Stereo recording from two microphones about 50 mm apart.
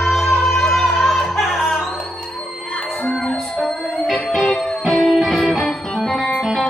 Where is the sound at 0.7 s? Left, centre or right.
Centre.